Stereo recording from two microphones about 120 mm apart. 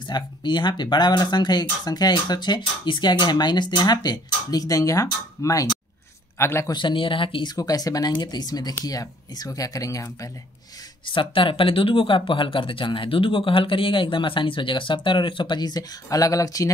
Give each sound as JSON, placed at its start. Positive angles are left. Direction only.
{"t": 0.1, "sound": "a man's voice", "side_deg": 40}
{"t": 6.7, "sound": "speech", "side_deg": 40}
{"t": 7.5, "sound": "speech", "side_deg": 30}
{"t": 11.1, "sound": "speech", "side_deg": 45}